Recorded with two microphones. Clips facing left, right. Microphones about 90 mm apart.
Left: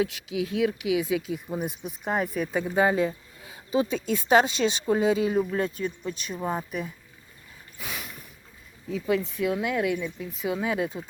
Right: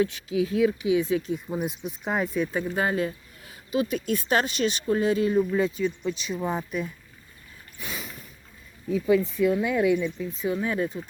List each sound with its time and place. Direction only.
0.0 s speech: 90° left
1.3 s speech: centre (ahead or behind)
2.7 s speech: 25° left (ahead or behind)
7.9 s a sound: 5° left (ahead or behind)
8.9 s speech: centre (ahead or behind)
10.4 s speech: 10° left (ahead or behind)